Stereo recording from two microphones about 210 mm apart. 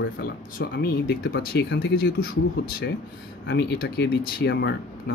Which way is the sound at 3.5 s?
50° left (ahead or behind).